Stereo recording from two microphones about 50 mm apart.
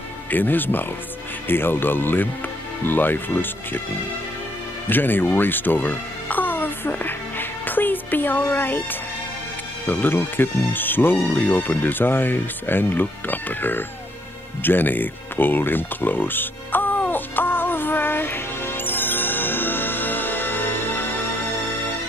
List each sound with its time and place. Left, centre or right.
0.3 s speech: left
4.8 s music: left
9.8 s speech: left
14.6 s music: left